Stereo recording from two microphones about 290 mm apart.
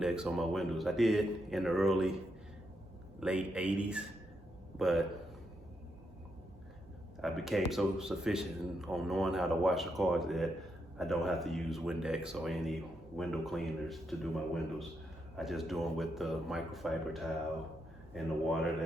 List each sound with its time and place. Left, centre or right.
0.0 s speech: centre
3.2 s speech: centre
7.2 s speech: centre